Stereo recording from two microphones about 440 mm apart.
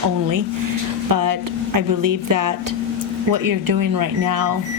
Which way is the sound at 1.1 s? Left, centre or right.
Right.